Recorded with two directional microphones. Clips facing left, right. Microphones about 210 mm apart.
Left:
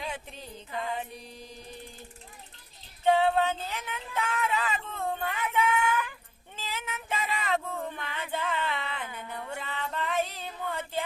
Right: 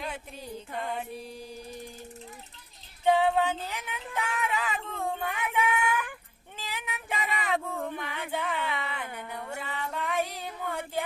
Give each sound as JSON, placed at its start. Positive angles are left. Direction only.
{"t": 0.0, "sound": "music", "side_deg": -10}
{"t": 0.7, "sound": "music", "side_deg": -55}
{"t": 0.9, "sound": "mantra", "side_deg": -10}
{"t": 3.0, "sound": "a sound", "side_deg": -15}
{"t": 9.1, "sound": "female singing", "side_deg": -15}